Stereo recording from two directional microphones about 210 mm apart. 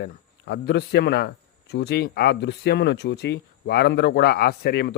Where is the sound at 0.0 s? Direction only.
50° left (ahead or behind).